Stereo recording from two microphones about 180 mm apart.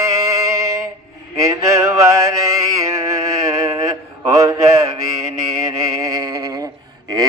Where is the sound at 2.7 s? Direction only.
20° right (ahead or behind).